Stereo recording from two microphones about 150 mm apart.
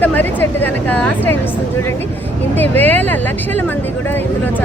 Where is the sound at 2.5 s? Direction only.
10° left (ahead or behind).